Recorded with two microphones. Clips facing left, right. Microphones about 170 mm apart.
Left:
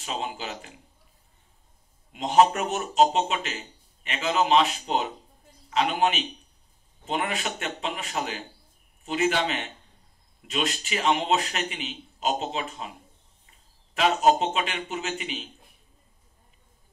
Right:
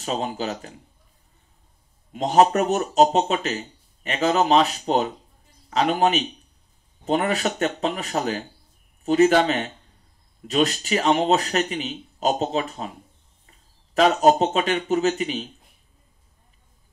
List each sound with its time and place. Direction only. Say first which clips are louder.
0.0 s speech: right 6 dB; 40° right (ahead or behind)
2.1 s speech: right 3 dB; 40° right (ahead or behind)
13.9 s speech: right 4 dB; 40° right (ahead or behind)